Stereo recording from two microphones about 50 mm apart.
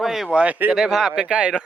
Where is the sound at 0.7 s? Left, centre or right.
Centre.